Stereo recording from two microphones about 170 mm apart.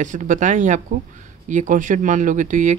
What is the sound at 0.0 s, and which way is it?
Speech, 50° right (ahead or behind).